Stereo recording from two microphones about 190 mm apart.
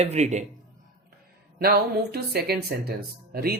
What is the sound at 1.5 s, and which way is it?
Speech, 55° right (ahead or behind).